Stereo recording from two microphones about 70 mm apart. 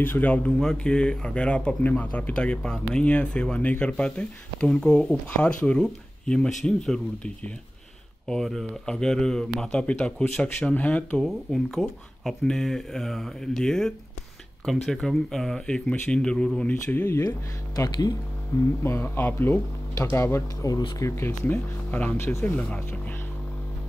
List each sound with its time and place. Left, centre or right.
0.0 s speech: left
0.5 s speech: centre
11.1 s speech: centre
16.5 s speech: left
17.7 s speech: left
18.8 s speech: left
20.6 s speech: left
21.5 s speech: left
22.1 s speech: left